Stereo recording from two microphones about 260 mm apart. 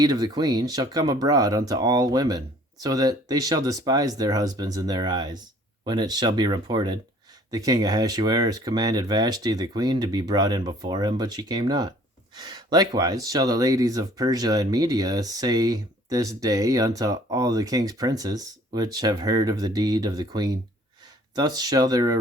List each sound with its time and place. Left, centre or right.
0.0 s speech: centre